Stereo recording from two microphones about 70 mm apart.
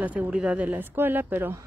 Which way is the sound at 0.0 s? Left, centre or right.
Right.